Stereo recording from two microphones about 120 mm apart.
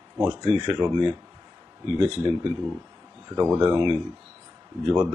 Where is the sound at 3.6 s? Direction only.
40° right (ahead or behind).